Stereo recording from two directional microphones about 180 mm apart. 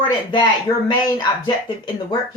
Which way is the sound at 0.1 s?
25° left (ahead or behind).